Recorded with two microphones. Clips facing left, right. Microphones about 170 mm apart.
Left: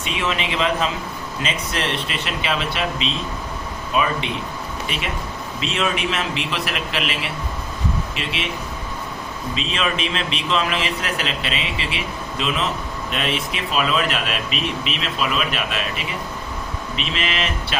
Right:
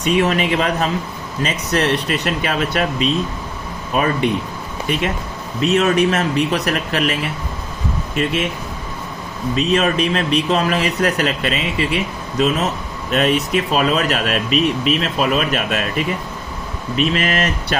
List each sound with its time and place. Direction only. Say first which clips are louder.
0.0 s a man's voice: right 8 dB; 45° right (ahead or behind)
5.5 s a man's voice: right 9 dB; 45° right (ahead or behind)
9.6 s a man's voice: right 8 dB; 45° right (ahead or behind)